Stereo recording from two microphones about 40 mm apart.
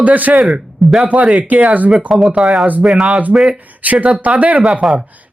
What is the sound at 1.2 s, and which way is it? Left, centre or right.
Speech, right.